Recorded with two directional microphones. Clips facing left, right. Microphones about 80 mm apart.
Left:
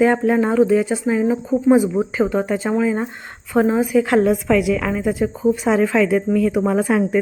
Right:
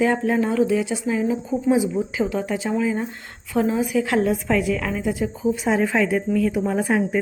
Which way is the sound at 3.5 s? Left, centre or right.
Left.